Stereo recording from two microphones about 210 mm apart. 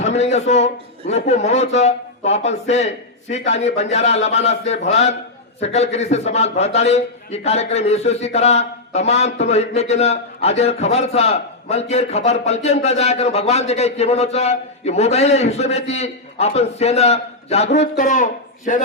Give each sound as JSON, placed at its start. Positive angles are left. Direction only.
{"t": 0.0, "sound": "a man's voice", "side_deg": 30}